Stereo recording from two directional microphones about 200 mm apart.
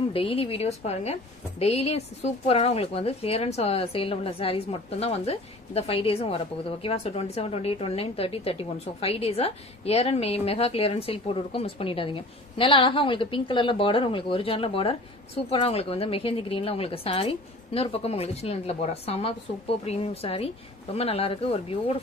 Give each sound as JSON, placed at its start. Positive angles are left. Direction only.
{"t": 0.1, "sound": "speech", "side_deg": 30}